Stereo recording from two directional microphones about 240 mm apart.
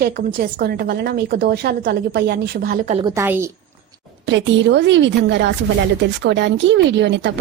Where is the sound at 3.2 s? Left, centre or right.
Centre.